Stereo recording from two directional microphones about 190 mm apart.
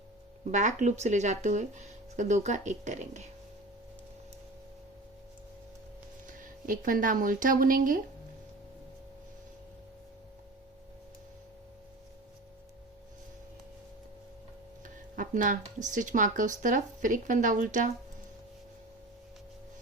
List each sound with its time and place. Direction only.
0.5 s speech: 40° right (ahead or behind)
6.2 s speech: 45° right (ahead or behind)
15.1 s speech: 45° right (ahead or behind)